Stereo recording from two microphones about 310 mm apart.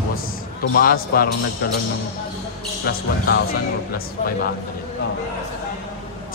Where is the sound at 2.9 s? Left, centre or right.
Left.